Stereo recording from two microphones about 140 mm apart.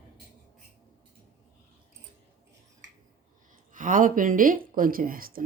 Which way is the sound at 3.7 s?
70° right (ahead or behind).